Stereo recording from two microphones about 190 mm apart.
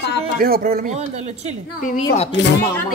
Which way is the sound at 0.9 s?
35° right (ahead or behind).